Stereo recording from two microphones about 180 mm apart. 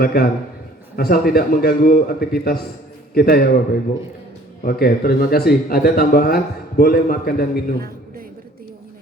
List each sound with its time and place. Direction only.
0.0 s speech: 55° left (ahead or behind)